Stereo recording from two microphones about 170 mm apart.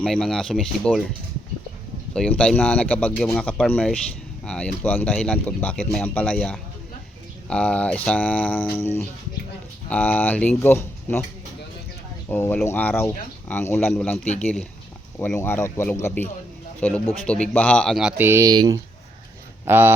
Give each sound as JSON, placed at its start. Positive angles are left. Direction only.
{"t": 0.0, "sound": "speech", "side_deg": 5}
{"t": 2.1, "sound": "speech", "side_deg": 5}
{"t": 12.3, "sound": "speech", "side_deg": 10}
{"t": 18.2, "sound": "speech", "side_deg": -15}
{"t": 19.6, "sound": "speech", "side_deg": -10}